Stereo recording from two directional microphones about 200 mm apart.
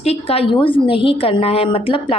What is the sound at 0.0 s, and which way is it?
A woman's voice, 30° left (ahead or behind).